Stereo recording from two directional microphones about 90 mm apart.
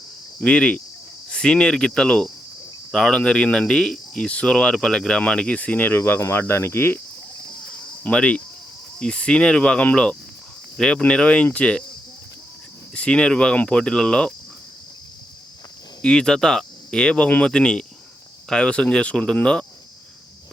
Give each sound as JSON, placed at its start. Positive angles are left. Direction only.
{"t": 0.3, "sound": "speech", "side_deg": 10}
{"t": 6.0, "sound": "cricket", "side_deg": 30}
{"t": 7.7, "sound": "cricket", "side_deg": 10}
{"t": 9.0, "sound": "speech", "side_deg": 10}
{"t": 12.9, "sound": "speech", "side_deg": 10}
{"t": 16.0, "sound": "speech", "side_deg": 10}